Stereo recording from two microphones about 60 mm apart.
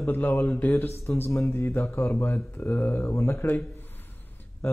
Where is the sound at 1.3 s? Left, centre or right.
Left.